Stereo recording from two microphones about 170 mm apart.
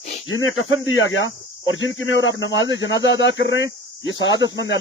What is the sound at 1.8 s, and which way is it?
Speech, 90° left.